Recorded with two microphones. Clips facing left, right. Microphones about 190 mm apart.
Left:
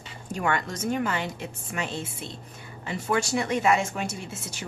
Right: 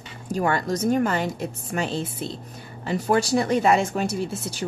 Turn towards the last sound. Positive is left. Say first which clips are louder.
# right 9 dB
turn(degrees=-35)  # may be behind; listen again after turning